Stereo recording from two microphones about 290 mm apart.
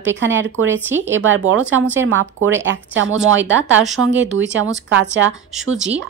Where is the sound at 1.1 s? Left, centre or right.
Right.